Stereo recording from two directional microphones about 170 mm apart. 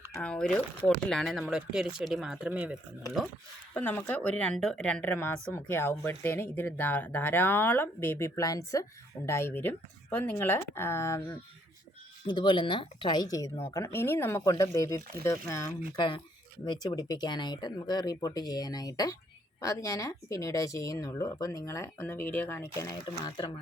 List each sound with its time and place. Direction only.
0.2 s speech: 5° left (ahead or behind)
3.8 s speech: 10° left (ahead or behind)
12.3 s speech: 25° left (ahead or behind)
16.0 s speech: 30° left (ahead or behind)